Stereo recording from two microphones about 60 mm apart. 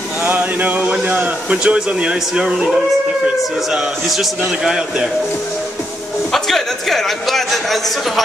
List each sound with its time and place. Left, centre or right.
0.2 s a sound: right
1.0 s speech: right
6.3 s a man's voice: centre